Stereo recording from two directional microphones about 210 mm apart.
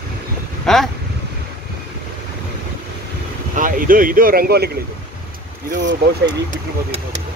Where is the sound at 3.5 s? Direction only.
40° right (ahead or behind).